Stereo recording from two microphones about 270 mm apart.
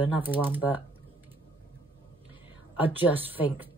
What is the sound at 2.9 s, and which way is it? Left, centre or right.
Speech, centre.